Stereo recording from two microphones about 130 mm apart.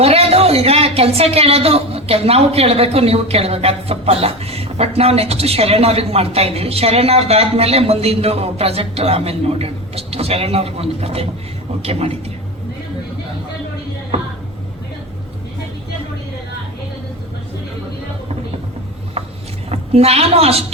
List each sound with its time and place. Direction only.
0.0 s speech: 50° right (ahead or behind)
19.7 s a woman's voice: 50° right (ahead or behind)